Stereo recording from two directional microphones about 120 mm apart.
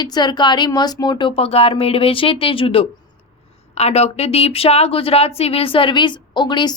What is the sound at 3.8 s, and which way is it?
Speech, 60° left (ahead or behind).